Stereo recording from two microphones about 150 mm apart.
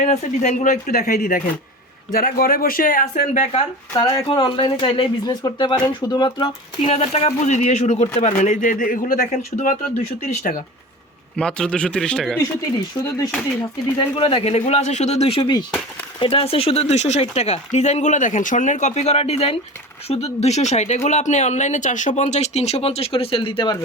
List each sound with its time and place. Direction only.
0.0 s speech: 55° left (ahead or behind)
3.9 s speech: 30° left (ahead or behind); by 10.6 s 60° left (ahead or behind)
11.3 s speech: 5° left (ahead or behind)
14.2 s speech: 40° left (ahead or behind)